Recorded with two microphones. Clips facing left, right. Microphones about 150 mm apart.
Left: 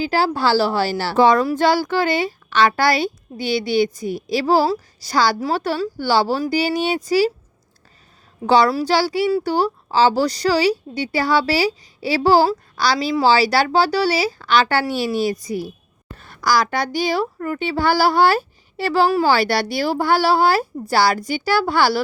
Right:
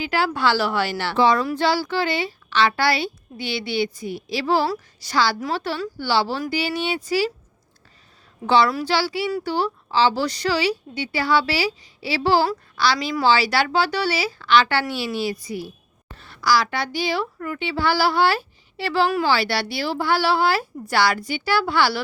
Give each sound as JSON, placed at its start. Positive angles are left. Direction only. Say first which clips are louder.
{"t": 0.0, "sound": "a woman's voice", "louder": "left 3 dB", "side_deg": 35}
{"t": 8.4, "sound": "a woman's voice", "louder": "left 3 dB", "side_deg": 40}